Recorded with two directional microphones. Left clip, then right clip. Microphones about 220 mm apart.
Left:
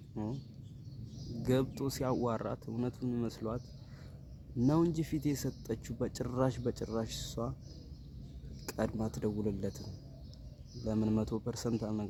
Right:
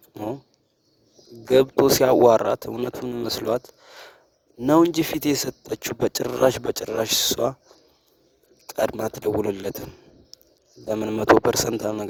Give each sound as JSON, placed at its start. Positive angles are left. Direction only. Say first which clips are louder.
{"t": 0.1, "sound": "a sound", "louder": "right 12 dB", "side_deg": -35}
{"t": 1.5, "sound": "speech", "louder": "right 18 dB", "side_deg": -40}
{"t": 8.7, "sound": "speech", "louder": "right 14 dB", "side_deg": -45}
{"t": 10.8, "sound": "speech", "louder": "right 17 dB", "side_deg": -40}